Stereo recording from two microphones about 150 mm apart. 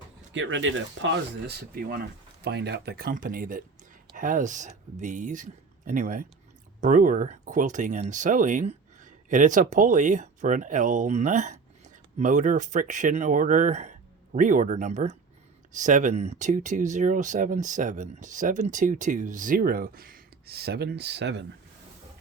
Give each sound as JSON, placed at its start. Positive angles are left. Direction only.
{"t": 1.5, "sound": "speech", "side_deg": -85}
{"t": 2.4, "sound": "speech", "side_deg": -90}
{"t": 14.3, "sound": "speech", "side_deg": -60}